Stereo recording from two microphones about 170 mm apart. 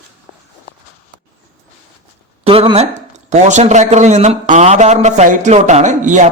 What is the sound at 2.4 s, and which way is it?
A man's voice, 35° right (ahead or behind).